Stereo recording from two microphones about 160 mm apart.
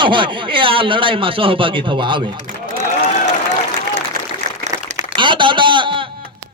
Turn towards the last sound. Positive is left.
turn(degrees=-30)  # may be behind; listen again after turning